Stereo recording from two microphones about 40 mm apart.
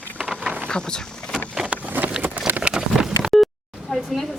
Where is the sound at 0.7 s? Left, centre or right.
Left.